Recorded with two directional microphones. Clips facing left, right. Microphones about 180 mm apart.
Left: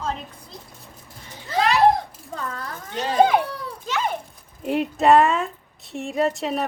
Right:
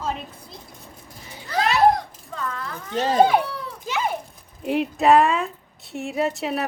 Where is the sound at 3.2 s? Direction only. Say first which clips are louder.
Left 1 dB; centre (ahead or behind).